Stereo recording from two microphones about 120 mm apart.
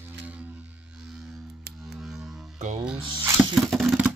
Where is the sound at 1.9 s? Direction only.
5° right (ahead or behind).